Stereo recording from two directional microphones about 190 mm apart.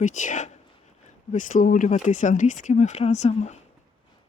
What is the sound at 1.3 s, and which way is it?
Speech, 45° left (ahead or behind).